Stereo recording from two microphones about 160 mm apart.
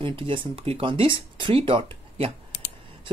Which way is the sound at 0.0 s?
30° right (ahead or behind).